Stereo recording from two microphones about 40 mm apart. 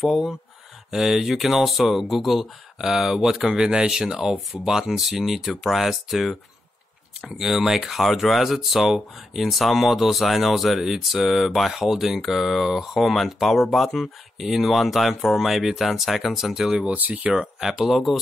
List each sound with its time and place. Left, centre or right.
0.9 s speech: centre
7.3 s speech: centre
17.1 s speech: right
17.4 s speech: centre